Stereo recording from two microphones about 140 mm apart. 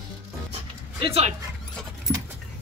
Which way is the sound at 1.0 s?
45° right (ahead or behind).